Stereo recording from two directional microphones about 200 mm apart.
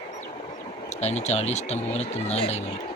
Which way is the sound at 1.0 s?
35° left (ahead or behind).